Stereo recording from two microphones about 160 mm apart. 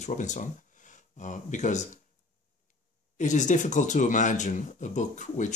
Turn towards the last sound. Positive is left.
turn(degrees=50)  # may be behind; listen again after turning